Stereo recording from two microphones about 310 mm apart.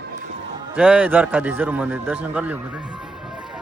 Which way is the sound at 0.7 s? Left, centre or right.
Centre.